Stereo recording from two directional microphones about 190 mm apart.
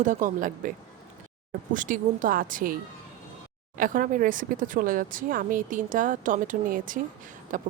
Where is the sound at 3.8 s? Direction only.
45° right (ahead or behind).